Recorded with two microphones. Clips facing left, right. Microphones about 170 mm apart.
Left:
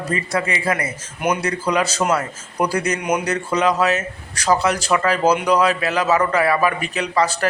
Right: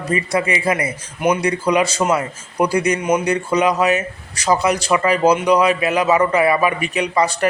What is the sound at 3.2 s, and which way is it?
A man's voice, 10° right (ahead or behind).